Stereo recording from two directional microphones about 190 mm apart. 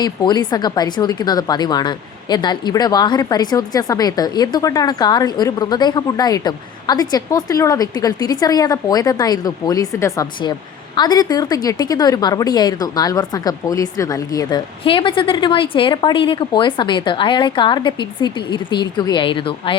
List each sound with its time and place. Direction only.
0.0 s speech: 20° left (ahead or behind)